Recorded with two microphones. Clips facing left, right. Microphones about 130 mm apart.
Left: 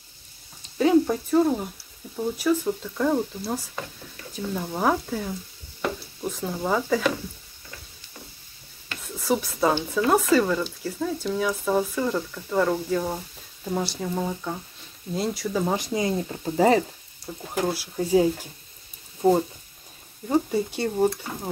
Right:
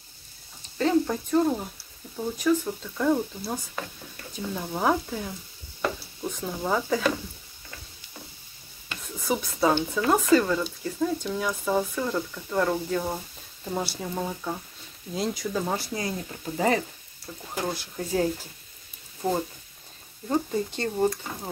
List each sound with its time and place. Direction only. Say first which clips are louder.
0.7 s speech: left 4 dB; 10° left (ahead or behind)
9.0 s speech: left 3 dB; centre (ahead or behind)
15.7 s speech: left 5 dB; 20° left (ahead or behind)
17.3 s speech: left 4 dB; 15° left (ahead or behind)
17.6 s speech: left 6 dB; 5° left (ahead or behind)
19.2 s speech: left 7 dB; 20° left (ahead or behind)
20.2 s speech: left 3 dB; 10° left (ahead or behind)